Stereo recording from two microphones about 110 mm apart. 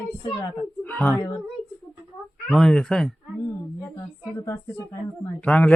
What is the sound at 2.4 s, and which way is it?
Speech, 5° left (ahead or behind).